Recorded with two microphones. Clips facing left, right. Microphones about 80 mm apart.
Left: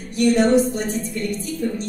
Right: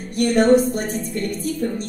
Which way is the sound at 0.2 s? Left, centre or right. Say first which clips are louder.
Right 1 dB; right.